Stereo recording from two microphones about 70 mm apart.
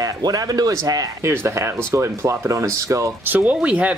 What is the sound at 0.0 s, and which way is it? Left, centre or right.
Speech, right.